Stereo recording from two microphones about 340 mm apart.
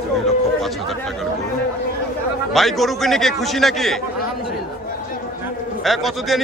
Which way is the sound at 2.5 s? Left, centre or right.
Centre.